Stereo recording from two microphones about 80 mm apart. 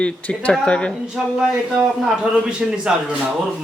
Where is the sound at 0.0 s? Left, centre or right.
Centre.